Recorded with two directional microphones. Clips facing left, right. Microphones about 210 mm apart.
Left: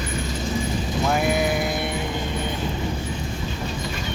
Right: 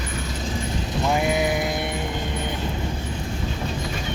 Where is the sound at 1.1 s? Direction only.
15° right (ahead or behind).